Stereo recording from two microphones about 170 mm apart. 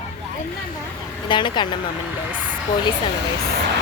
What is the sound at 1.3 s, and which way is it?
Speech, 25° left (ahead or behind).